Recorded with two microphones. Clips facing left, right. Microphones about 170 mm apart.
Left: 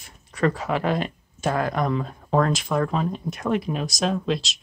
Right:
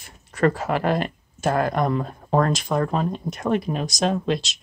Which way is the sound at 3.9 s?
Centre (ahead or behind).